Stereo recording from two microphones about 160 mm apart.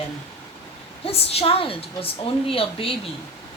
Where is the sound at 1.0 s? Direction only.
40° left (ahead or behind).